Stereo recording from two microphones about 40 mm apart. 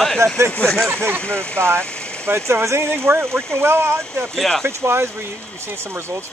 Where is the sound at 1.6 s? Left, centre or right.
Right.